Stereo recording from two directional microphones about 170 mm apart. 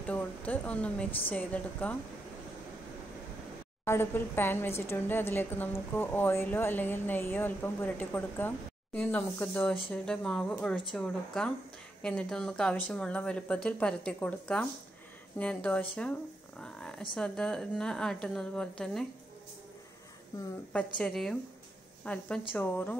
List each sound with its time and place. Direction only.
0.0 s a woman's voice: 10° left (ahead or behind)
3.8 s a woman's voice: 15° left (ahead or behind)
20.7 s a woman's voice: 5° left (ahead or behind)